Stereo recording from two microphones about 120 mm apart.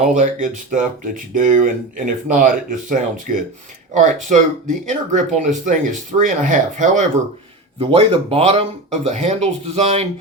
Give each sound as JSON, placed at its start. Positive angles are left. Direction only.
{"t": 0.0, "sound": "speech", "side_deg": -90}
{"t": 4.3, "sound": "speech", "side_deg": -90}
{"t": 7.8, "sound": "speech", "side_deg": -50}